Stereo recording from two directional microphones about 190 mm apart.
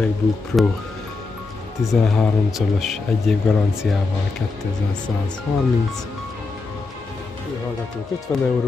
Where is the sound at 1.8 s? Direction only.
Centre (ahead or behind).